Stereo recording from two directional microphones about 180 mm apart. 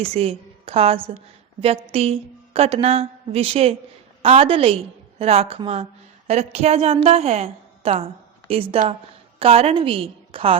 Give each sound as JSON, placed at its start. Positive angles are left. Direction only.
{"t": 0.0, "sound": "a woman's voice", "side_deg": -35}